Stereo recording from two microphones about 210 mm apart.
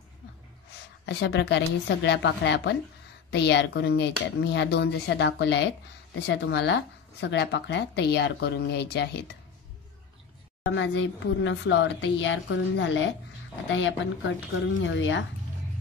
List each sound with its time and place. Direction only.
1.0 s speech: 55° left (ahead or behind)
10.6 s speech: 60° left (ahead or behind)